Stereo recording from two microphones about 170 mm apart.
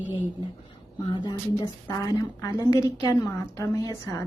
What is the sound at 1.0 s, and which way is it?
A woman's voice, 25° left (ahead or behind).